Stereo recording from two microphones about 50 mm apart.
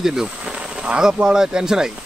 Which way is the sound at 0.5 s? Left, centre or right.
Centre.